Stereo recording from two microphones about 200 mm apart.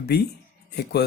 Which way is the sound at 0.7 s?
55° left (ahead or behind).